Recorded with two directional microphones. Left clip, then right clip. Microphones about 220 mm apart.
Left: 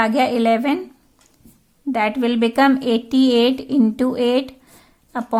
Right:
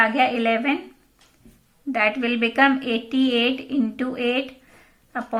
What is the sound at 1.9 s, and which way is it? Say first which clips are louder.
A woman's voice: left 2 dB; 40° left (ahead or behind).